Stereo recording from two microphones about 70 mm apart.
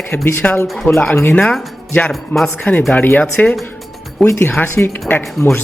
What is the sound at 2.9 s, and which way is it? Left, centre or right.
Speech, left.